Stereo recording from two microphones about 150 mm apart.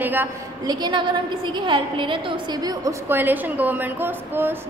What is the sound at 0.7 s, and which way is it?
A woman's voice, 30° right (ahead or behind).